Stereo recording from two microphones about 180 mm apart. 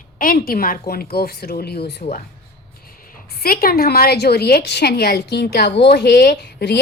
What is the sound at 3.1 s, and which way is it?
A woman's voice, 60° left (ahead or behind).